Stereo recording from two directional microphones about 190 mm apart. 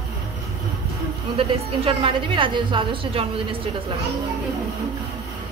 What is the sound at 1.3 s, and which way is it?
A woman's voice, 30° right (ahead or behind).